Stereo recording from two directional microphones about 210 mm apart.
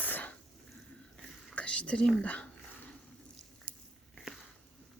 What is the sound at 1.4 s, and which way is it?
Speech, 5° left (ahead or behind).